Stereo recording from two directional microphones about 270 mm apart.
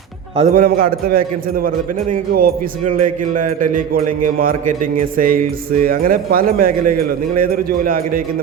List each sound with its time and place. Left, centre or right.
0.3 s a man's voice: right